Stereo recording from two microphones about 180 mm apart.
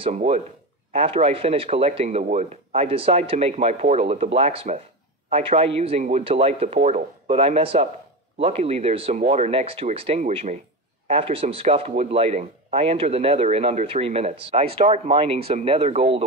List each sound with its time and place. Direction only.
0.0 s speech: 40° right (ahead or behind)